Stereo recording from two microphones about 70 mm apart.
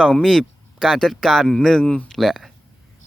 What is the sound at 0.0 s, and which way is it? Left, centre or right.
Speech, centre.